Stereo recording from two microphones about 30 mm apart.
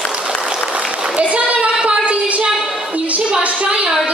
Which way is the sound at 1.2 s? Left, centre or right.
Right.